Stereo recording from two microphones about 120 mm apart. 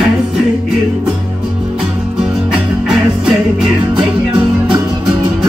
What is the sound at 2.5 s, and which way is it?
Music, 5° right (ahead or behind).